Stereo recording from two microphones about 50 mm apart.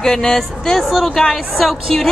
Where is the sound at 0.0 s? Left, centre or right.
Centre.